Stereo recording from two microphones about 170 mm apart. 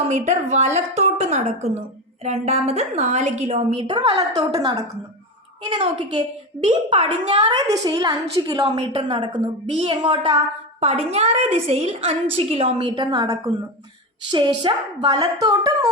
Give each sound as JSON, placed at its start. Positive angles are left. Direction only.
{"t": 0.1, "sound": "a woman's voice", "side_deg": -45}
{"t": 8.9, "sound": "a child's voice", "side_deg": -35}